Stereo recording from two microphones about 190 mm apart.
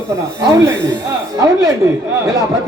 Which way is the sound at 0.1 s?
15° right (ahead or behind).